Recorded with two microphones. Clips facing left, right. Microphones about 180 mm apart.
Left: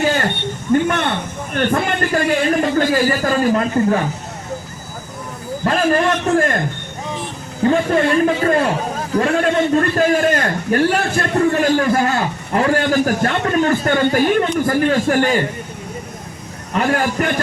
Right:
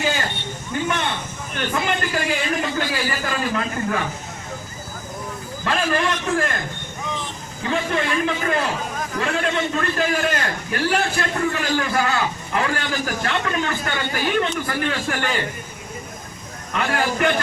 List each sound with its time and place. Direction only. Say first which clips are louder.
0.0 s a man's voice: left 6 dB; 60° left (ahead or behind); by 4.0 s 40° left (ahead or behind)
5.6 s a man's voice: left 6 dB; 40° left (ahead or behind)
7.6 s a man's voice: left 8 dB; 45° left (ahead or behind)
16.7 s a man's voice: left 5 dB; 40° left (ahead or behind)